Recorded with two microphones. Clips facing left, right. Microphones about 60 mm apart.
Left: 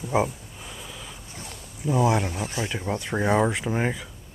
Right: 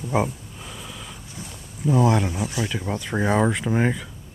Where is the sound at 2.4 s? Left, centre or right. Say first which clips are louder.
Right 2 dB; left.